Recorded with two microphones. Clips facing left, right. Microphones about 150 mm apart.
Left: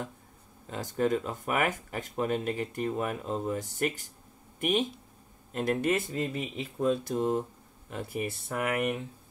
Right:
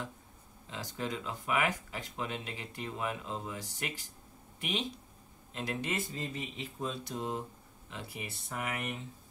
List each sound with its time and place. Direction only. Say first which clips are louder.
0.7 s speech: left 10 dB; 50° left (ahead or behind)